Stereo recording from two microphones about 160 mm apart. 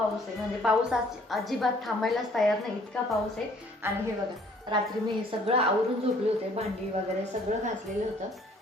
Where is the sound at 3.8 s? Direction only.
15° right (ahead or behind).